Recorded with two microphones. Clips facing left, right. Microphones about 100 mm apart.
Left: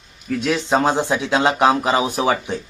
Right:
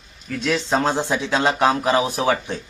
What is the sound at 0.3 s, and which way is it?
Speech, 15° left (ahead or behind).